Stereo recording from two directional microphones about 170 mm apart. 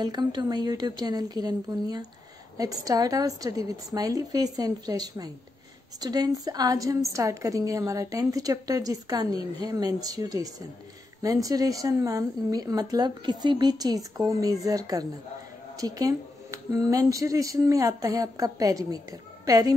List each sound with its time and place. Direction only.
0.0 s a woman's voice: 25° right (ahead or behind)